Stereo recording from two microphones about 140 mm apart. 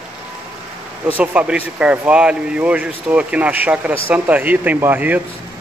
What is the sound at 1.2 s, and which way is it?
A man's voice, 10° right (ahead or behind).